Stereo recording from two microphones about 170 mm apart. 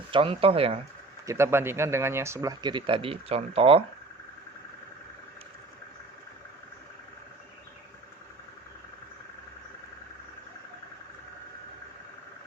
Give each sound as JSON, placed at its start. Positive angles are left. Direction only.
{"t": 0.1, "sound": "speech", "side_deg": -30}
{"t": 1.3, "sound": "speech", "side_deg": -15}